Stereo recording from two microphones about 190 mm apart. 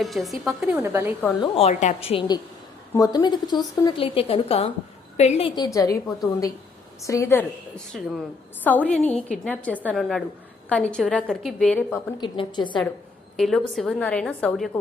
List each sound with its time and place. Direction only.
0.0 s a woman's voice: centre (ahead or behind)
0.8 s a woman's voice: 15° right (ahead or behind)
1.4 s a woman's voice: 30° left (ahead or behind)
7.0 s a woman's voice: 15° left (ahead or behind)
7.9 s a woman's voice: centre (ahead or behind)
12.2 s a woman's voice: 25° left (ahead or behind)
13.3 s a woman's voice: centre (ahead or behind)